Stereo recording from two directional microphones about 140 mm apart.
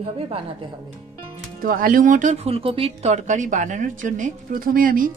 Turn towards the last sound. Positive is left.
turn(degrees=-85)